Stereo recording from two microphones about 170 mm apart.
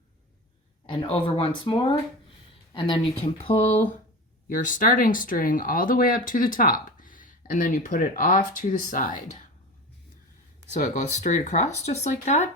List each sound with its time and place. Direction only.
0.9 s speech: 30° left (ahead or behind)
4.4 s speech: 50° left (ahead or behind)
10.7 s speech: 45° left (ahead or behind)